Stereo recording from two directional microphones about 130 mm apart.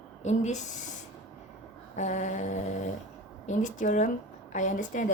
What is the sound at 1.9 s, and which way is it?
A woman's voice, 70° left (ahead or behind).